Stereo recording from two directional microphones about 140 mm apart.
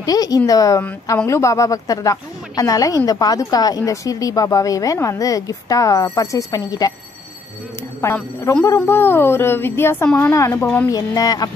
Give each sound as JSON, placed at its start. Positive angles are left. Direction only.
{"t": 0.0, "sound": "speech", "side_deg": 25}
{"t": 8.0, "sound": "speech", "side_deg": 20}
{"t": 10.3, "sound": "speech", "side_deg": 20}